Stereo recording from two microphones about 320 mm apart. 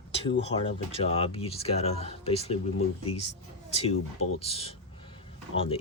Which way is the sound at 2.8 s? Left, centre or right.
Left.